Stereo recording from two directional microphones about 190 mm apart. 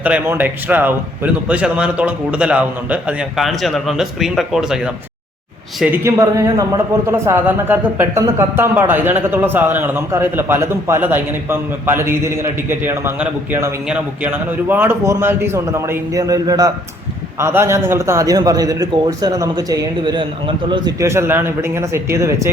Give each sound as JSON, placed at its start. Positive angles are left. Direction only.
{"t": 0.0, "sound": "a man's voice", "side_deg": -10}